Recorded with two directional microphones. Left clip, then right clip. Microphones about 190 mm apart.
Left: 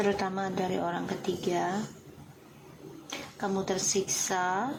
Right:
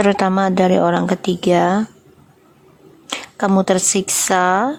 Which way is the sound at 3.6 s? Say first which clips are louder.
Right 12 dB; 60° right (ahead or behind).